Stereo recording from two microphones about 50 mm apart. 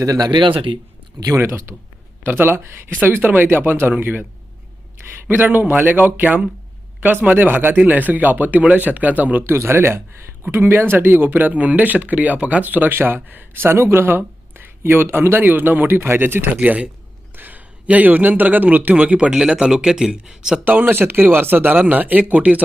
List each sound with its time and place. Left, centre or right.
1.4 s speech: right
2.2 s speech: right
5.3 s speech: right
9.6 s speech: right
12.6 s speech: right
13.7 s speech: right
16.6 s speech: right
17.3 s a man's voice: right
19.3 s speech: centre
20.7 s speech: right